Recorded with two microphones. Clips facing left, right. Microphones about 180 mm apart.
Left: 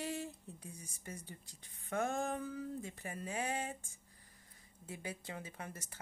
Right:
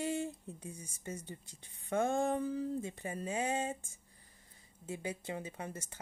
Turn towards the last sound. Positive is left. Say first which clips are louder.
# right 5 dB
turn(degrees=-25)  # may be behind; listen again after turning